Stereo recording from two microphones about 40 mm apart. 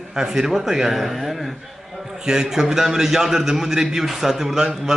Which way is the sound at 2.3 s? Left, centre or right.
Centre.